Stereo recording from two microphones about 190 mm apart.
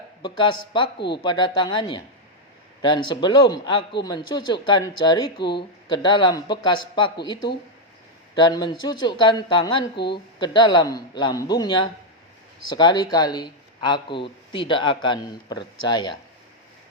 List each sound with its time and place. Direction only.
0.2 s speech: 25° left (ahead or behind)
8.4 s speech: 20° left (ahead or behind)